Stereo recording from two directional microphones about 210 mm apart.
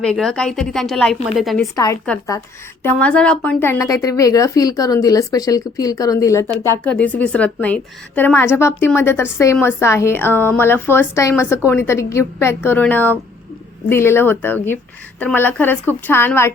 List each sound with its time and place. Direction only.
0.0 s a woman's voice: 5° left (ahead or behind)
1.7 s a woman's voice: 15° left (ahead or behind)
2.8 s a woman's voice: 5° left (ahead or behind)